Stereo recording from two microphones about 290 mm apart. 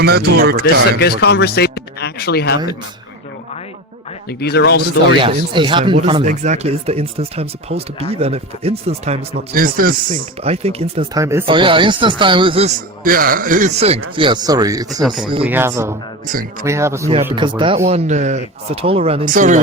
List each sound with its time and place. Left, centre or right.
0.0 s speech: right
0.9 s speech: left
4.3 s speech: left
5.2 s speech: centre
15.0 s speech: centre
16.2 s speech: right
16.6 s speech: centre; by 19.5 s right